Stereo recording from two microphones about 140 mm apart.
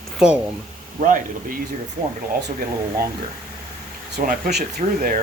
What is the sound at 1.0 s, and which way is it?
Speech, 70° right (ahead or behind).